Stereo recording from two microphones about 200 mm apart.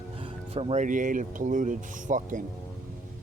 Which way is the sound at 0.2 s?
25° right (ahead or behind).